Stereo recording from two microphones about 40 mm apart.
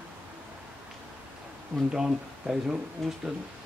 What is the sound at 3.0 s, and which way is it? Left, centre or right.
Speech, centre.